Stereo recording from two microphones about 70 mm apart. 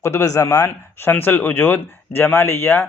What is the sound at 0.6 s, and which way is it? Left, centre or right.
A man's voice, left.